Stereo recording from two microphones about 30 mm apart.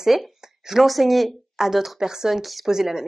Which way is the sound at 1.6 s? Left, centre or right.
Centre.